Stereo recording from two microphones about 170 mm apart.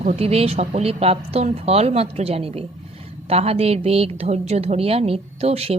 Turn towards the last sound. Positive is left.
turn(degrees=-40)  # may be behind; listen again after turning